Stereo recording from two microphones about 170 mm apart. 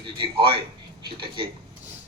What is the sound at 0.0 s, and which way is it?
Speech, 30° right (ahead or behind).